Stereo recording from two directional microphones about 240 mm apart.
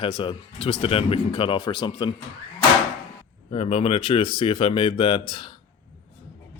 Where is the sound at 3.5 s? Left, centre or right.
Left.